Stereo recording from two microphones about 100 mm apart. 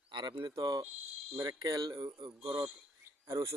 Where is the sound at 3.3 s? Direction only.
35° right (ahead or behind).